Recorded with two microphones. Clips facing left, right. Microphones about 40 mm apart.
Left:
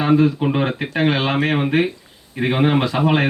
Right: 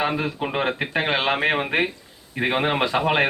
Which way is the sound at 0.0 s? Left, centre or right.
Centre.